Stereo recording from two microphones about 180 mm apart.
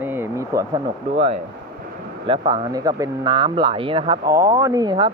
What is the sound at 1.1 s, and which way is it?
Speech, 35° right (ahead or behind).